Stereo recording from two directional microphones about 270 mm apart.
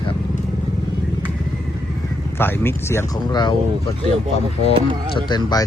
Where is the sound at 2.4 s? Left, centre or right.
Centre.